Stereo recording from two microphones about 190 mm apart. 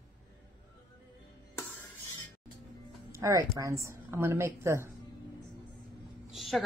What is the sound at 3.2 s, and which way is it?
A woman's voice, 15° right (ahead or behind).